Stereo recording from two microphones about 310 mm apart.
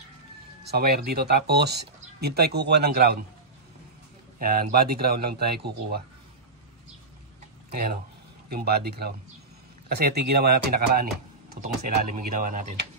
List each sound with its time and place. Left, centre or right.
0.7 s speech: right
4.4 s speech: right
7.7 s speech: right
12.2 s speech: right